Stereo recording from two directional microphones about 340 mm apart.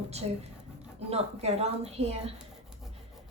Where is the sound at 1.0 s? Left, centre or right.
Centre.